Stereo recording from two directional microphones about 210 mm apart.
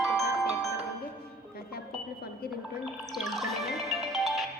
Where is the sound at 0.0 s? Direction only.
Centre (ahead or behind).